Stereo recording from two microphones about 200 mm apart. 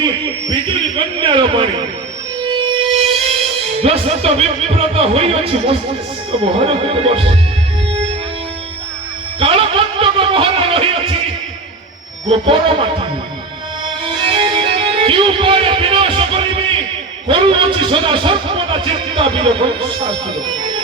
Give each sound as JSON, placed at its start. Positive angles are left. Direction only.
{"t": 0.5, "sound": "a man's voice", "side_deg": -25}
{"t": 2.4, "sound": "music", "side_deg": -25}
{"t": 3.2, "sound": "a man's voice", "side_deg": -30}
{"t": 9.4, "sound": "a sound", "side_deg": -25}
{"t": 12.3, "sound": "a man's voice", "side_deg": -25}
{"t": 13.8, "sound": "music", "side_deg": -25}
{"t": 17.2, "sound": "a man's voice", "side_deg": -25}